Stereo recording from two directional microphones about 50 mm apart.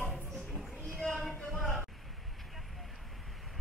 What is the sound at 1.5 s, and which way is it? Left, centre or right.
Music, centre.